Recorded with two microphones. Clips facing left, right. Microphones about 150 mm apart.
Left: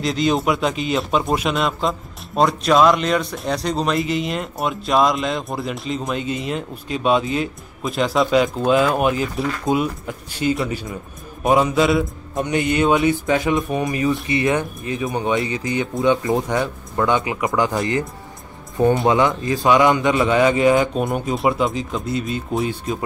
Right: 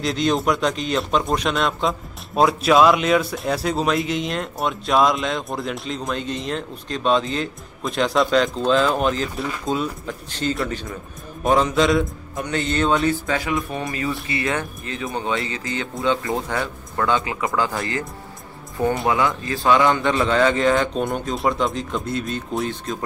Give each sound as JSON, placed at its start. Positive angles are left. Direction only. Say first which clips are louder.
{"t": 0.0, "sound": "speech", "louder": "left 1 dB", "side_deg": 0}
{"t": 19.0, "sound": "speech", "louder": "left 4 dB", "side_deg": 20}